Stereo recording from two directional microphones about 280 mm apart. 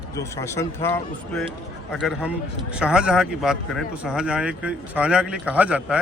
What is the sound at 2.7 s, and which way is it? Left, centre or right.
Speech, centre.